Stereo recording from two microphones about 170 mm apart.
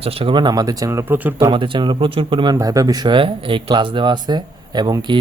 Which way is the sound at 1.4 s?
30° right (ahead or behind).